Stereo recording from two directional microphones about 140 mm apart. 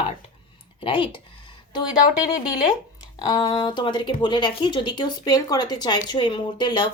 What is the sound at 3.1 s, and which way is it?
Speech, 30° left (ahead or behind).